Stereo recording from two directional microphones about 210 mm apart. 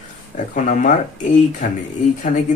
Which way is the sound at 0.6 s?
35° left (ahead or behind).